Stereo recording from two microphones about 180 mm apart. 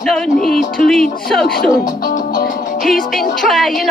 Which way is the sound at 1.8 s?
50° left (ahead or behind).